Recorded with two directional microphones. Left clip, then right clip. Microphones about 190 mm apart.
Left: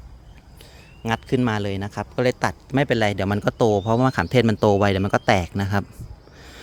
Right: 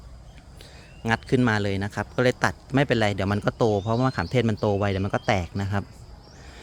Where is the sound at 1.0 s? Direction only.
10° left (ahead or behind).